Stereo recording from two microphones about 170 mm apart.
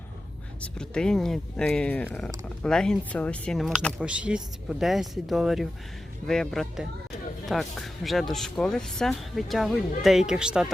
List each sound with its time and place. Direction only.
0.6 s speech: 5° left (ahead or behind)